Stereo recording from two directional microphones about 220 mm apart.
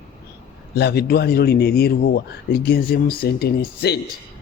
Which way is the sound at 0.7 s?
45° left (ahead or behind).